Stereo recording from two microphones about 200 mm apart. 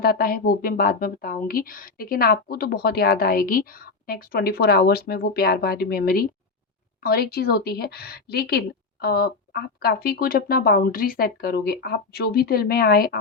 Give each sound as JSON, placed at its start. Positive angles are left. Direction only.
{"t": 0.0, "sound": "speech", "side_deg": 50}